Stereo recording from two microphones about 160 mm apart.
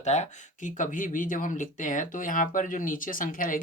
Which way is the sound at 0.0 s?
45° left (ahead or behind).